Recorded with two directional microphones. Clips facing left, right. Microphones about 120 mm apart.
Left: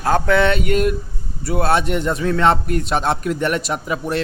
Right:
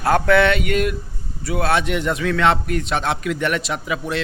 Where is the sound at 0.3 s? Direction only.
35° left (ahead or behind).